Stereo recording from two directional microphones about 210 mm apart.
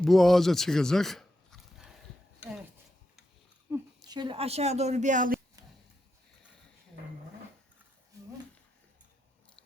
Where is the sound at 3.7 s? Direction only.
10° right (ahead or behind); by 5.3 s 40° right (ahead or behind).